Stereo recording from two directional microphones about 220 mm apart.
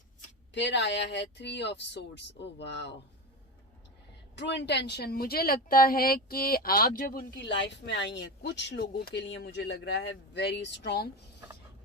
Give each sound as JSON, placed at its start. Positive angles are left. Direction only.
{"t": 0.5, "sound": "speech", "side_deg": 50}
{"t": 4.4, "sound": "speech", "side_deg": 50}